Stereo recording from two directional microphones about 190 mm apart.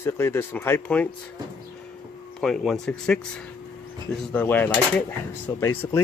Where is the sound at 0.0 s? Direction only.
15° left (ahead or behind).